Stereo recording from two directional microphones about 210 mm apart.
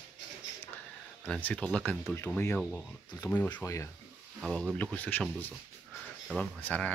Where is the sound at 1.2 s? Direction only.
5° left (ahead or behind).